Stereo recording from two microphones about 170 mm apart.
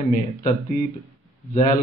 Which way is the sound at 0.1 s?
50° left (ahead or behind).